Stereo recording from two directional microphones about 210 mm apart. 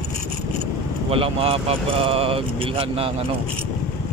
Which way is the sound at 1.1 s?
25° right (ahead or behind).